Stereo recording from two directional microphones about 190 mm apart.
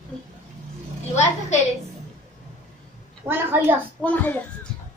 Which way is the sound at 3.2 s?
10° right (ahead or behind).